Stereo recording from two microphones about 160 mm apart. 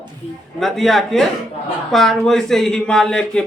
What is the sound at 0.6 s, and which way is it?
Speech, centre (ahead or behind).